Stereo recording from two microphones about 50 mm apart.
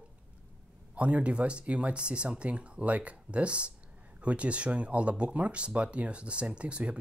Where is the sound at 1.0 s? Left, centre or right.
Right.